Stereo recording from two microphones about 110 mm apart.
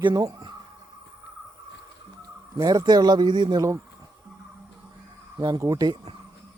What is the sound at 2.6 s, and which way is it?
A man's voice, 35° right (ahead or behind).